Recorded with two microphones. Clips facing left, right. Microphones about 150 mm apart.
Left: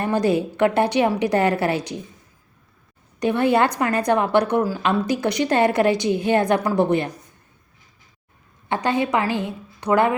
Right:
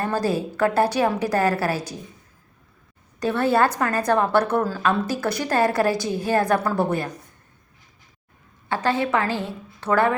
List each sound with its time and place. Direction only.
0.0 s a woman's voice: 20° left (ahead or behind)
3.2 s a woman's voice: 15° left (ahead or behind)
8.7 s a woman's voice: 20° left (ahead or behind)